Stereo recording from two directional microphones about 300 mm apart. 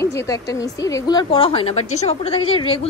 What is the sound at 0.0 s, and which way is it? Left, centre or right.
A woman's voice, centre.